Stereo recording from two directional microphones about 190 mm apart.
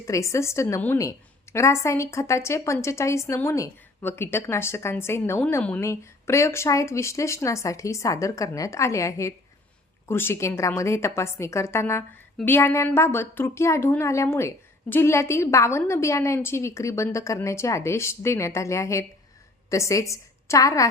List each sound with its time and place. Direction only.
0.0 s a woman's voice: 15° left (ahead or behind)